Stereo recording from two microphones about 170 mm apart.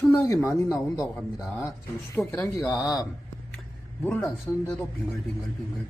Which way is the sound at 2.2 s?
5° left (ahead or behind).